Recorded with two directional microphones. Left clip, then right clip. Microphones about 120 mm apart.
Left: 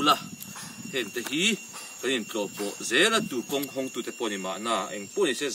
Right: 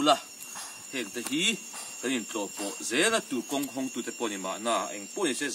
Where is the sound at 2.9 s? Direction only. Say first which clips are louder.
Left 4 dB; 15° right (ahead or behind).